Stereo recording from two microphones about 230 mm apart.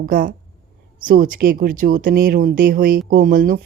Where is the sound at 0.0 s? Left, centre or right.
Right.